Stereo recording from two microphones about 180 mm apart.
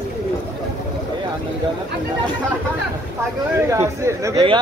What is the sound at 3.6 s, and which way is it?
Speech, 15° right (ahead or behind).